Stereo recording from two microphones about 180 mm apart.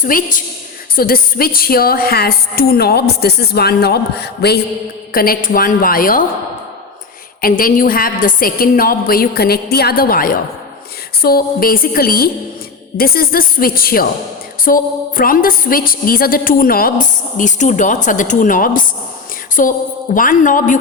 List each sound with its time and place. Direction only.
0.0 s a woman's voice: 45° left (ahead or behind); by 4.6 s 65° left (ahead or behind)
5.1 s a woman's voice: 55° left (ahead or behind)
7.4 s a woman's voice: 50° left (ahead or behind)